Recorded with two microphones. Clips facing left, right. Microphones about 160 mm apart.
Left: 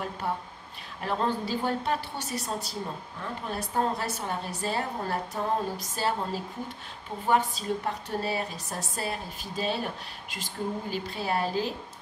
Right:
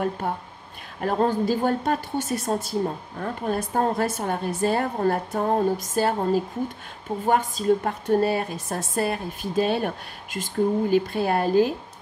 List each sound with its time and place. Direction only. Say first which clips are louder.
0.2 s a woman's voice: right 3 dB; 50° right (ahead or behind)